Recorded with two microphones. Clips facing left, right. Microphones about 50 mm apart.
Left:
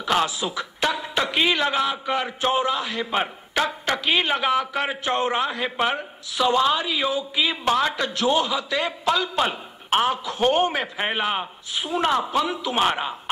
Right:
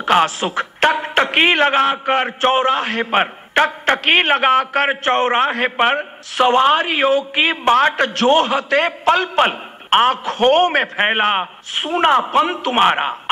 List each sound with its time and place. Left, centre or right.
0.0 s a man's voice: right